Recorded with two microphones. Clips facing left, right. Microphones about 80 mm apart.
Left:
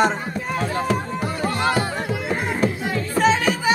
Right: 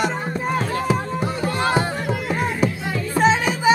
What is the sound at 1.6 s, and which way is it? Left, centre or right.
Music, right.